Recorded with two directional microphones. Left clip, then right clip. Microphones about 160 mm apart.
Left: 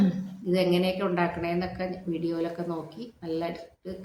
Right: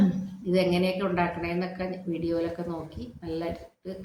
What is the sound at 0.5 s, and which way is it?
Speech, 10° left (ahead or behind).